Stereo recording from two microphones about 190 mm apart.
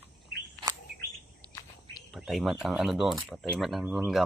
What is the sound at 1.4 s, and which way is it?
Insect, 20° right (ahead or behind).